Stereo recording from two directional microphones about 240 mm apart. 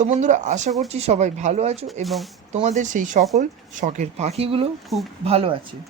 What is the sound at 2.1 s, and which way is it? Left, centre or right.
Speech, centre.